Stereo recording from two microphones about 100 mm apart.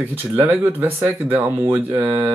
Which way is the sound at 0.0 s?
20° right (ahead or behind).